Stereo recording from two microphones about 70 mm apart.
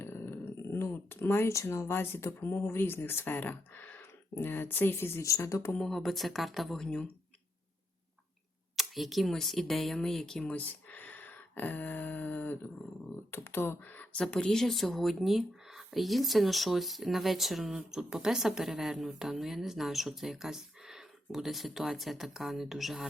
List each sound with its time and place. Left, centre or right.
0.0 s a sound: left
1.5 s speech: left
5.5 s speech: left
5.7 s speech: centre
8.7 s speech: centre
10.4 s speech: centre
14.2 s speech: centre